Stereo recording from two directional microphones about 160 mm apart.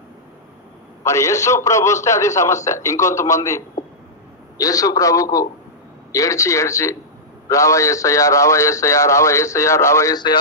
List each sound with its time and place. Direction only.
1.0 s a man's voice: 20° left (ahead or behind)